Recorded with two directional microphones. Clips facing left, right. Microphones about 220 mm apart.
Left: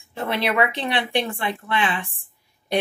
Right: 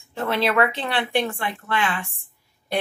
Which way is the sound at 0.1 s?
15° left (ahead or behind).